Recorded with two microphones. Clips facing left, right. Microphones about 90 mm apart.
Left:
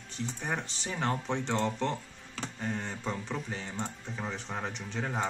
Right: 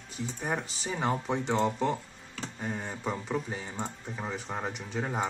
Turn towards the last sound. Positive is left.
turn(degrees=-10)  # may be behind; listen again after turning